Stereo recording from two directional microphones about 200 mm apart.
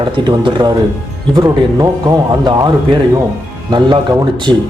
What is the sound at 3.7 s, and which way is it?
Speech, 20° right (ahead or behind).